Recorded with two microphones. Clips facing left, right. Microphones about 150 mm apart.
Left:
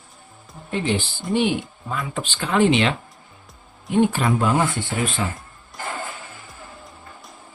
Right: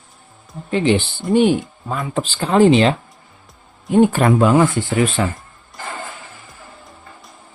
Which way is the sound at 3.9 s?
50° right (ahead or behind).